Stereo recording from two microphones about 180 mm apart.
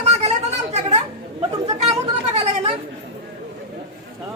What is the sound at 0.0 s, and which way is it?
Chatter, 35° right (ahead or behind).